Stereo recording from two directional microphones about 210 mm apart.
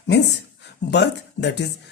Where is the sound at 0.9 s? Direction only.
55° left (ahead or behind).